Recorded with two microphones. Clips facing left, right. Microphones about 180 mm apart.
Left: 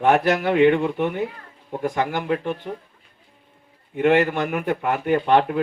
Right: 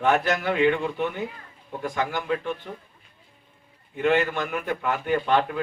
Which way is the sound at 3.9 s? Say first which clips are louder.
Left 5 dB; 60° left (ahead or behind).